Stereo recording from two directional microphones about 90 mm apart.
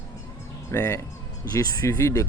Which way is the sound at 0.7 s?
30° left (ahead or behind).